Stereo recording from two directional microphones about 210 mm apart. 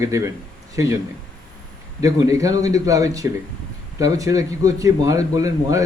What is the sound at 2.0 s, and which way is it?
Speech, 15° right (ahead or behind).